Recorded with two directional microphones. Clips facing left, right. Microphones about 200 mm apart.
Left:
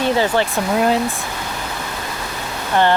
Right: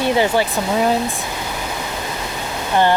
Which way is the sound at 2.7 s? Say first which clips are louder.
Even; 15° right (ahead or behind).